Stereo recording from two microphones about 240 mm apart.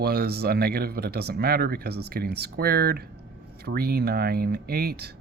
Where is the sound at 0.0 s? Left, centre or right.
Right.